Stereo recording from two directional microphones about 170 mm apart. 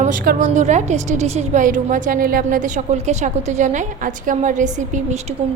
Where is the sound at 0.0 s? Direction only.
50° right (ahead or behind).